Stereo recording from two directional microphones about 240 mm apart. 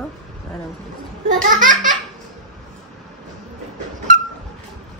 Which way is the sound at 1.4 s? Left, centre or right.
Right.